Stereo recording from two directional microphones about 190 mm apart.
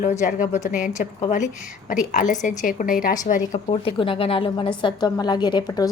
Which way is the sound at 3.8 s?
30° left (ahead or behind).